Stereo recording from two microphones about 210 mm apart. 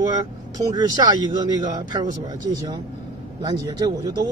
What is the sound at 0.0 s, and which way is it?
Speech, 20° right (ahead or behind).